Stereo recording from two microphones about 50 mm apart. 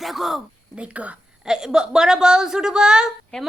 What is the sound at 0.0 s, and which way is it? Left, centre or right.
Speech, centre.